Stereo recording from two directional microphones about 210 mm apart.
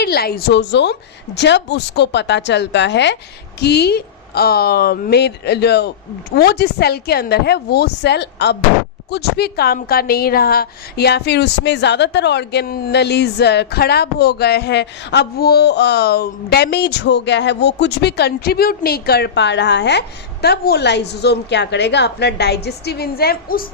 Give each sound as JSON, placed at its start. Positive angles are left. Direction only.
{"t": 0.0, "sound": "a woman's voice", "side_deg": 50}